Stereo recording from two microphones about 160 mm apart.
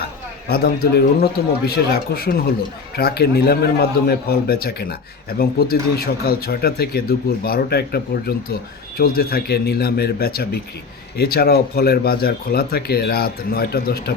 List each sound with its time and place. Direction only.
0.0 s a man's voice: 75° left (ahead or behind)
9.0 s a man's voice: 70° left (ahead or behind)